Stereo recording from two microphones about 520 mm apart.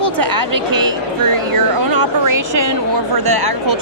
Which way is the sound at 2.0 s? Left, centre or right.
Right.